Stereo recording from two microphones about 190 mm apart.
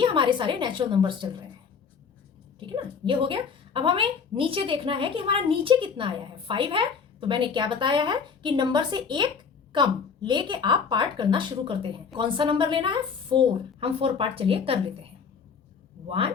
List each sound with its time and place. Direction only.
0.0 s a woman's voice: 25° right (ahead or behind)
2.6 s a woman's voice: 25° right (ahead or behind)
16.0 s speech: 30° right (ahead or behind)